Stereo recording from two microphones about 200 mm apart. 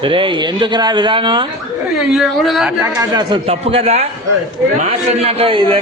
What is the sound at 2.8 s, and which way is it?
Speech, 20° right (ahead or behind).